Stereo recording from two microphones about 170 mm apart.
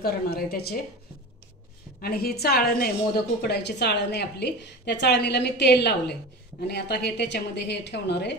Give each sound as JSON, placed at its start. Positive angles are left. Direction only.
{"t": 0.0, "sound": "a woman's voice", "side_deg": 65}
{"t": 2.0, "sound": "a woman's voice", "side_deg": 65}